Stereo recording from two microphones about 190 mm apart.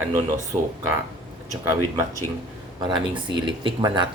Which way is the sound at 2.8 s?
25° right (ahead or behind).